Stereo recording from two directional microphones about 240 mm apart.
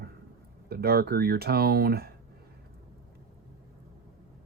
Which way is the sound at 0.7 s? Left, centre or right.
Right.